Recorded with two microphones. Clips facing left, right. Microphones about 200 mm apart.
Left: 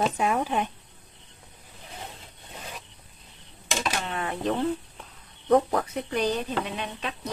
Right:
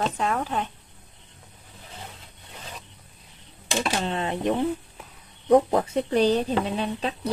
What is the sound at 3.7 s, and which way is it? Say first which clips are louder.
Speech: right 4 dB; 30° right (ahead or behind).